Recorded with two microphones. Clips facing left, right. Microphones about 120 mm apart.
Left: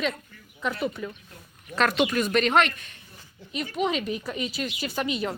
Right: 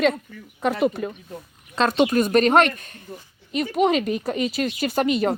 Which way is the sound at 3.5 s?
55° right (ahead or behind).